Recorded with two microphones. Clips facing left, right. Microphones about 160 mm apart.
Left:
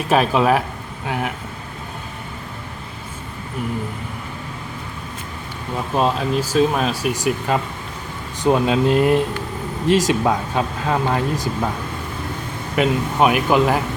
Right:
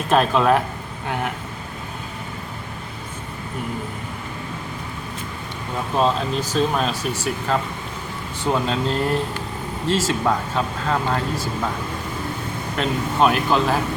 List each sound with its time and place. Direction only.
0.1 s speech: 5° left (ahead or behind)
6.0 s speech: 10° left (ahead or behind)
12.7 s speech: 10° left (ahead or behind)